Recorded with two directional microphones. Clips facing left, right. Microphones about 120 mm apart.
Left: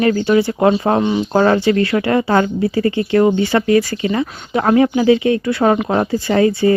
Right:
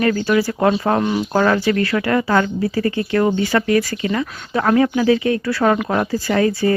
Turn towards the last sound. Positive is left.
turn(degrees=25)  # may be behind; listen again after turning